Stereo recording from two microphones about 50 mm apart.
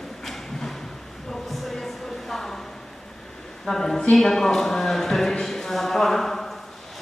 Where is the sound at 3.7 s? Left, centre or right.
Centre.